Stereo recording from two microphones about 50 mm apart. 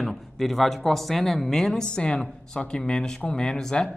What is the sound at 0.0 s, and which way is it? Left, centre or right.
A man's voice, centre.